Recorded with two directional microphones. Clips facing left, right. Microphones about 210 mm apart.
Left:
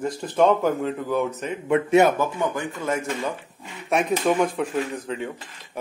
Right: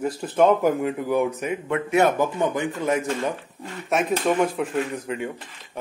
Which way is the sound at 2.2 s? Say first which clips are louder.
Right 2 dB; 20° right (ahead or behind).